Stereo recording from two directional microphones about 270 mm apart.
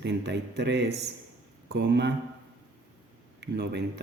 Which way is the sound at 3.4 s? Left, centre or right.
Right.